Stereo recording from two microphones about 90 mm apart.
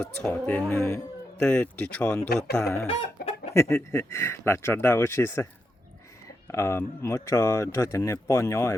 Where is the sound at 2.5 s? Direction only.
30° left (ahead or behind).